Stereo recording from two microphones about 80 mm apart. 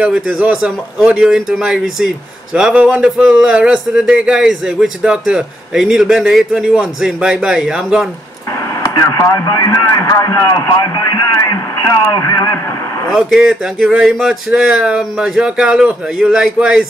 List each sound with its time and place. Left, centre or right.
0.0 s a man's voice: centre
8.9 s speech: left
10.0 s speech: left
13.1 s a man's voice: centre